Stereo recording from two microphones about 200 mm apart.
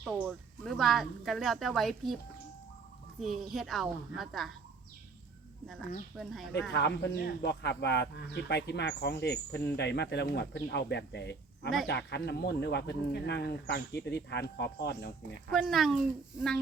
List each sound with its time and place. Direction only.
0.0 s speech: centre (ahead or behind)
3.2 s speech: centre (ahead or behind)
6.1 s speech: centre (ahead or behind)
6.7 s speech: 60° left (ahead or behind)
15.5 s speech: centre (ahead or behind)